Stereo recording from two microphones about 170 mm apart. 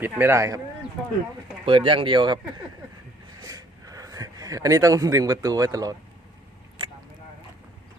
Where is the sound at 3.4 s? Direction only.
20° right (ahead or behind).